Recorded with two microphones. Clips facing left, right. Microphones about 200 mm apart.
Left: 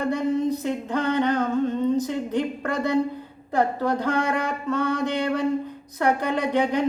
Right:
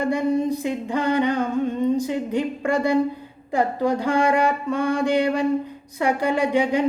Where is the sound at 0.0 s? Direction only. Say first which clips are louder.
Right 2 dB; 10° right (ahead or behind).